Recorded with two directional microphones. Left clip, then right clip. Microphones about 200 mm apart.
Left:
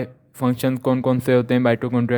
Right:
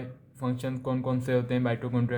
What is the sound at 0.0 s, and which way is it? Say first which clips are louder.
Speech: left 11 dB; 50° left (ahead or behind).